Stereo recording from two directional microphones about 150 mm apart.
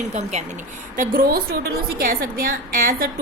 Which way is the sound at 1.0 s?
75° right (ahead or behind).